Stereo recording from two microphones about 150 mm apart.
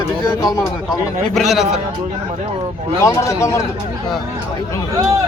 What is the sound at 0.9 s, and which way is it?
Speech, centre (ahead or behind).